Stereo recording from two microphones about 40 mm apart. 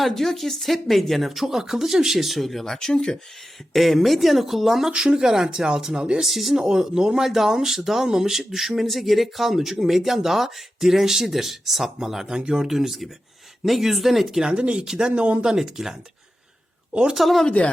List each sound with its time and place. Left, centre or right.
0.0 s speech: centre
3.7 s speech: centre
4.9 s speech: right
6.2 s speech: centre
6.6 s speech: centre
14.4 s speech: right
14.8 s speech: centre
15.1 s speech: right
15.4 s speech: centre
16.9 s speech: right
17.2 s speech: centre